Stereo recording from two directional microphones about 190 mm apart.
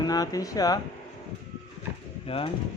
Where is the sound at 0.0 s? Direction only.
20° left (ahead or behind).